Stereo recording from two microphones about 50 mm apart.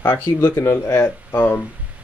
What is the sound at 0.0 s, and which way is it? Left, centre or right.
Speech, left.